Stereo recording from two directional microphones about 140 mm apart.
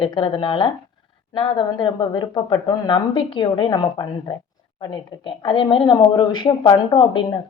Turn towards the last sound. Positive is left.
turn(degrees=35)  # may be behind; listen again after turning